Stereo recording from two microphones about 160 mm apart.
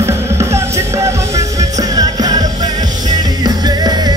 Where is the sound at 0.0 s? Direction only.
15° right (ahead or behind).